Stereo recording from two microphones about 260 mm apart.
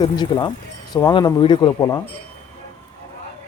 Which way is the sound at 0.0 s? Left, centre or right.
Centre.